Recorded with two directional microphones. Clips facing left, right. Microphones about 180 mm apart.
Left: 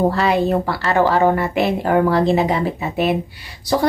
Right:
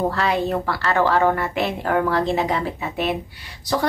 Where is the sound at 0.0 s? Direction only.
15° left (ahead or behind).